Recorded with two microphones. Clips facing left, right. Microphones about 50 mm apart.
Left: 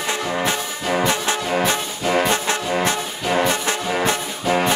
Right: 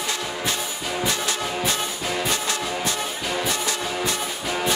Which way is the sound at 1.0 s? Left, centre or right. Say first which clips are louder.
Left 4 dB; left.